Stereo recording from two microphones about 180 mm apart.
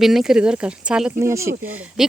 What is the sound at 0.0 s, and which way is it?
Speech, centre (ahead or behind).